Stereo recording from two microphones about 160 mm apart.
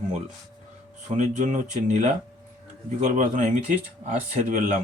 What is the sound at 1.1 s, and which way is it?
Speech, 50° right (ahead or behind).